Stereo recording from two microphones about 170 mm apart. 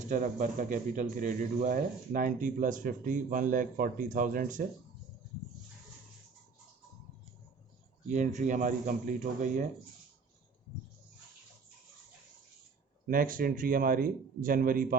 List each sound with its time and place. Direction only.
0.1 s speech: 50° right (ahead or behind)
8.0 s speech: 45° right (ahead or behind)
13.1 s speech: 55° right (ahead or behind)